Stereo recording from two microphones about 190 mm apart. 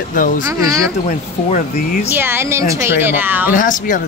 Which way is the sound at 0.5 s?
15° right (ahead or behind).